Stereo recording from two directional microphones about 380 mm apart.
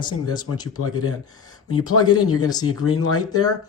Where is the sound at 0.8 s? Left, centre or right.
Left.